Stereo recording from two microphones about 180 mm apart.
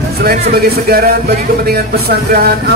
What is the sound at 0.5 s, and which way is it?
Speech, 60° right (ahead or behind).